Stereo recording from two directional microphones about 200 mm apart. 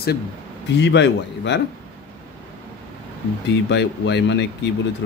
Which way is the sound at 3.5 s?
60° left (ahead or behind).